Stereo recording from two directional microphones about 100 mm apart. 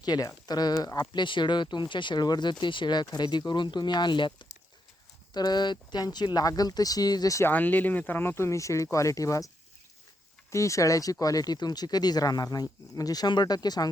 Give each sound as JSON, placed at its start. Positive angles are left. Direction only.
{"t": 0.0, "sound": "speech", "side_deg": 40}
{"t": 7.4, "sound": "speech", "side_deg": 15}
{"t": 10.5, "sound": "speech", "side_deg": 30}